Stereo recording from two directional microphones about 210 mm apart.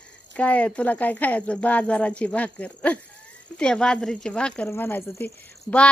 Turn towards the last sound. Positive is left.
turn(degrees=5)  # may be behind; listen again after turning